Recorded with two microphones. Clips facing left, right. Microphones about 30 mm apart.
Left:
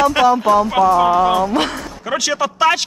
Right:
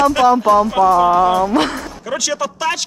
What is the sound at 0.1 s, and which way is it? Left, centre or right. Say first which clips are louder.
Speech: right 1 dB; left.